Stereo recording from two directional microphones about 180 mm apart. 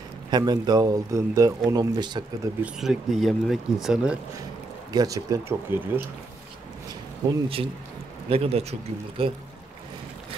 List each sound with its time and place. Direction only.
0.3 s speech: 25° right (ahead or behind)
2.6 s speech: 5° right (ahead or behind)
4.9 s speech: 20° right (ahead or behind)
7.2 s speech: 15° right (ahead or behind)
8.3 s speech: 35° right (ahead or behind)